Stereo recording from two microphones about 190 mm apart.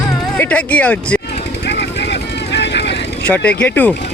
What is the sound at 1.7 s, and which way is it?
Vehicle, 65° left (ahead or behind).